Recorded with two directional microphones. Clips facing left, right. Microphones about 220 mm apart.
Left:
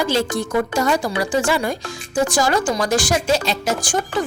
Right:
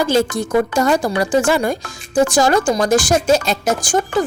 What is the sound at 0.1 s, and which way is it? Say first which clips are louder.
Speech: right 4 dB; 45° right (ahead or behind).